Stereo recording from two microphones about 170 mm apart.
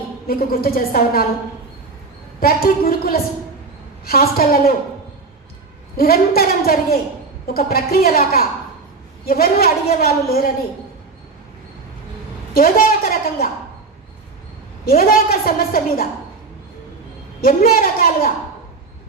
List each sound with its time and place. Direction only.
0.3 s a woman's voice: 60° left (ahead or behind)
2.4 s a woman's voice: 60° left (ahead or behind)
6.0 s a woman's voice: 60° left (ahead or behind)
12.5 s a woman's voice: 55° left (ahead or behind)
14.8 s a woman's voice: 60° left (ahead or behind)
17.4 s a woman's voice: 60° left (ahead or behind)